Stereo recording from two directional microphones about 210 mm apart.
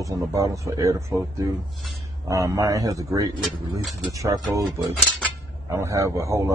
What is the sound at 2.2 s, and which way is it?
Speech, 15° right (ahead or behind).